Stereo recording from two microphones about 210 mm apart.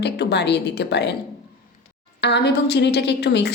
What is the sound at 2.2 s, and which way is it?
A woman's voice, 50° left (ahead or behind).